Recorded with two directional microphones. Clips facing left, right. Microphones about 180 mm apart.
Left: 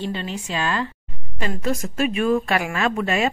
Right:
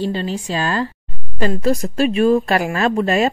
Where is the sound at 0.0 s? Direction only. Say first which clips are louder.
Right 6 dB; 35° right (ahead or behind).